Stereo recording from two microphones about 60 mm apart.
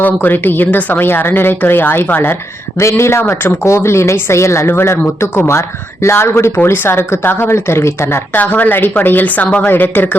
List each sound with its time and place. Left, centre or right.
0.0 s speech: left
2.7 s a woman's voice: left
8.4 s speech: left